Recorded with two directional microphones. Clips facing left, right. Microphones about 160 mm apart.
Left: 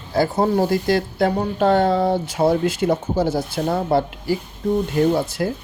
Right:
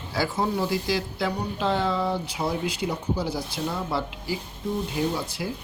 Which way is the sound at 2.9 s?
90° left.